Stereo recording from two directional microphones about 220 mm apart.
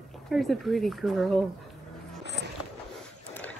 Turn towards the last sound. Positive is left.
turn(degrees=5)  # may be behind; listen again after turning